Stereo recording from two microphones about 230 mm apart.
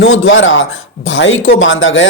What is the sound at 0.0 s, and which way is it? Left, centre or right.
A man's voice, left.